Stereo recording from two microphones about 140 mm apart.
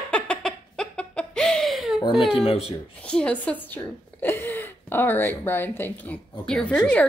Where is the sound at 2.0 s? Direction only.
Centre (ahead or behind).